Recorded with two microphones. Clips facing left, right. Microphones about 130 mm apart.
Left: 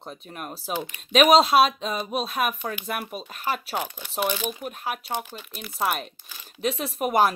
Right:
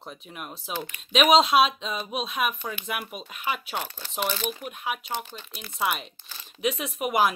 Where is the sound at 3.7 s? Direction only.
10° left (ahead or behind).